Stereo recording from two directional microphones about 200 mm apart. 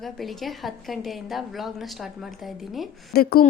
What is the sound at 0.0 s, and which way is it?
A woman's voice, centre (ahead or behind).